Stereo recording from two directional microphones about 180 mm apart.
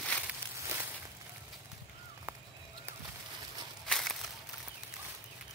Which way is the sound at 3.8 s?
Centre (ahead or behind).